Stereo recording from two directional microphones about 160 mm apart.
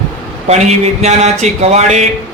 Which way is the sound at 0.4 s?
45° right (ahead or behind).